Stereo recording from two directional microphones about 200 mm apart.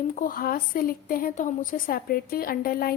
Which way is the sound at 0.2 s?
45° left (ahead or behind).